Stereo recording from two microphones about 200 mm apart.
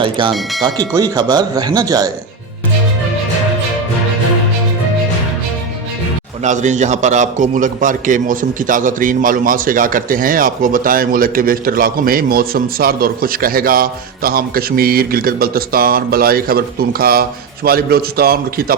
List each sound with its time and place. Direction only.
0.0 s speech: 25° right (ahead or behind)
6.4 s a man's voice: 35° right (ahead or behind)